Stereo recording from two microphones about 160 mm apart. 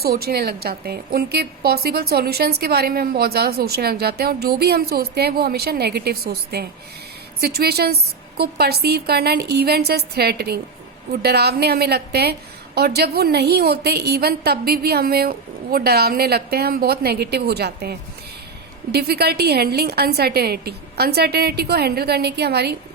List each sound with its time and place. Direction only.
0.0 s a woman's voice: 75° right (ahead or behind); by 22.7 s 90° right